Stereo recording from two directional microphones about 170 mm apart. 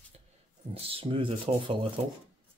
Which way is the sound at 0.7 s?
35° right (ahead or behind).